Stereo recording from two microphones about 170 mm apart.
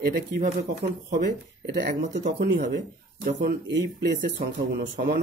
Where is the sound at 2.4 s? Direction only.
60° right (ahead or behind).